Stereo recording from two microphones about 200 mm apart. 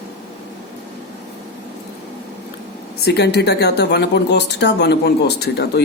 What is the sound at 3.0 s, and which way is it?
Speech, 55° left (ahead or behind).